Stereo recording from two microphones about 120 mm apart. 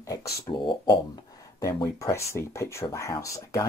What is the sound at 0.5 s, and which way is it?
Speech, 40° left (ahead or behind).